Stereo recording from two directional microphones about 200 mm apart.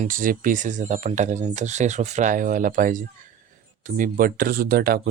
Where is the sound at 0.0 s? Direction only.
45° right (ahead or behind).